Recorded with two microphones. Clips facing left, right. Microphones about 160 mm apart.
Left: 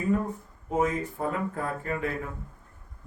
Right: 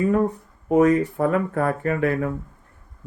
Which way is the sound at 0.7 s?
70° right (ahead or behind).